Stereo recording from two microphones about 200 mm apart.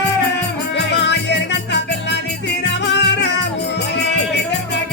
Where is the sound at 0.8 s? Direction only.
60° left (ahead or behind).